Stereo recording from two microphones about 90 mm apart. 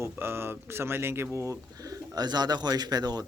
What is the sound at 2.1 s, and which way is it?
A man's voice, 50° right (ahead or behind).